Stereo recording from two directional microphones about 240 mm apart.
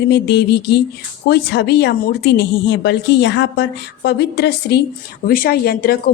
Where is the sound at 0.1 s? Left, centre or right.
Left.